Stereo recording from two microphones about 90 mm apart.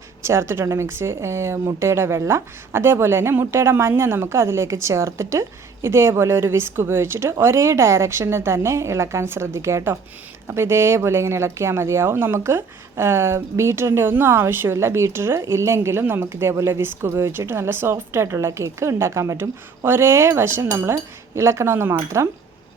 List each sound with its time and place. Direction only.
0.2 s speech: 30° right (ahead or behind)